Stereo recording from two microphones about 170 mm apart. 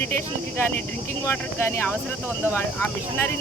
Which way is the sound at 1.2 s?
15° left (ahead or behind).